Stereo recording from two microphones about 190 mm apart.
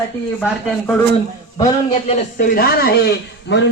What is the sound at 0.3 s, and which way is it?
Speech, 5° left (ahead or behind).